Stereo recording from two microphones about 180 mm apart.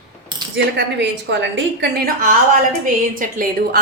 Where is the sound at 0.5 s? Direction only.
70° right (ahead or behind).